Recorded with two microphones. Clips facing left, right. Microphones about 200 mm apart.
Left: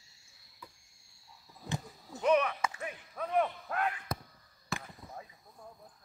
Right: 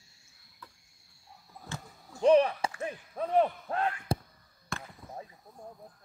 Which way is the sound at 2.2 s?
30° right (ahead or behind).